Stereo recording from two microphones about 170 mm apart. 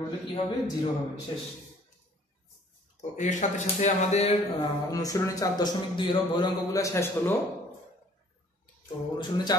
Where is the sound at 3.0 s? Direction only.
45° left (ahead or behind).